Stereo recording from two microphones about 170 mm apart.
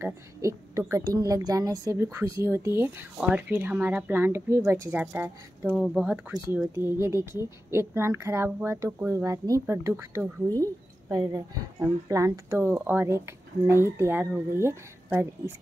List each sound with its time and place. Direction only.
0.0 s a woman's voice: 20° right (ahead or behind)
6.7 s a woman's voice: 15° right (ahead or behind)